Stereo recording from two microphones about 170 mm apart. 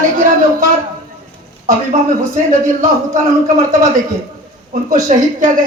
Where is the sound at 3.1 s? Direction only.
50° right (ahead or behind).